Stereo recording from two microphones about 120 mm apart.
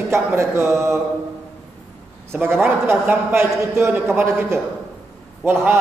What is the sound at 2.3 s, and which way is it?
A man's voice, 15° right (ahead or behind).